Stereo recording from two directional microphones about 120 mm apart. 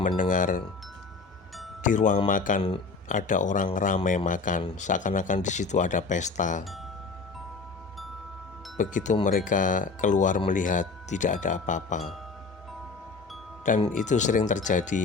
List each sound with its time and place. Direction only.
0.2 s speech: 90° left
1.8 s speech: 90° left
2.6 s a man's voice: 50° left (ahead or behind)
3.1 s speech: 90° left
8.8 s speech: 90° left
13.9 s speech: 90° left